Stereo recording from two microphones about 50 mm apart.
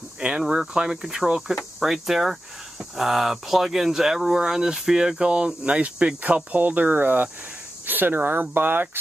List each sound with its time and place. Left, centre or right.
0.4 s speech: centre
1.6 s speech: centre; by 9.0 s right